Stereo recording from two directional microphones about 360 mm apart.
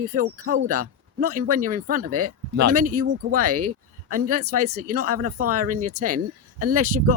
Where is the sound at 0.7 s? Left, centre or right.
Right.